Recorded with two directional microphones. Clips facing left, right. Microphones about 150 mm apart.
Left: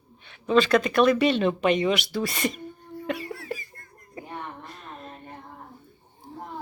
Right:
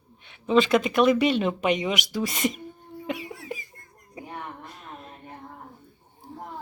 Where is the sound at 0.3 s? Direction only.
20° right (ahead or behind).